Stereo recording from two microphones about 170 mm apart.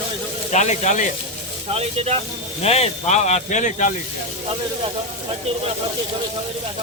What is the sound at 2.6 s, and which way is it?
Speech, 40° left (ahead or behind).